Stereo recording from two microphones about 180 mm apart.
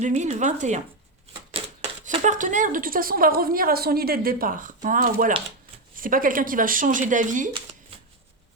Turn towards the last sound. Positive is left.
turn(degrees=-45)  # may be behind; listen again after turning